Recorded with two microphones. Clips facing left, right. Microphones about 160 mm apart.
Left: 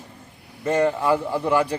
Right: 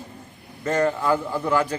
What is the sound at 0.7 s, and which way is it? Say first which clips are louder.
A man's voice: left 1 dB; 10° left (ahead or behind).